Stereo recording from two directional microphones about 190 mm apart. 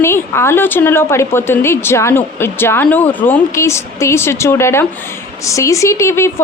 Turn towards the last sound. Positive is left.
turn(degrees=15)  # may be behind; listen again after turning